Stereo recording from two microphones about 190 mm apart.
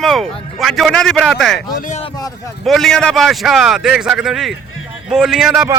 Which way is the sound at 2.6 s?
Centre (ahead or behind).